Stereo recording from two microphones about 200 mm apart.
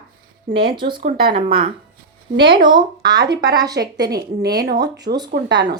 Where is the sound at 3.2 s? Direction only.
55° right (ahead or behind).